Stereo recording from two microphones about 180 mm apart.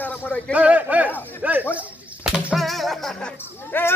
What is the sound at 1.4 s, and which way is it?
Snake, 10° right (ahead or behind).